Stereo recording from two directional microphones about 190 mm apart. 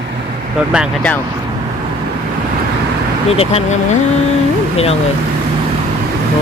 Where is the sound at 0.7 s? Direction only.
5° right (ahead or behind).